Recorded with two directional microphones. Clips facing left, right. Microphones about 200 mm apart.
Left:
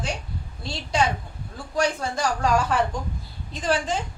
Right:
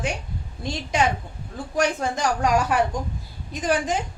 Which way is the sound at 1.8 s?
20° right (ahead or behind).